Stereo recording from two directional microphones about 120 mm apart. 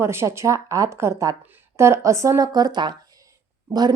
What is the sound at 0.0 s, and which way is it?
A woman's voice, 20° right (ahead or behind).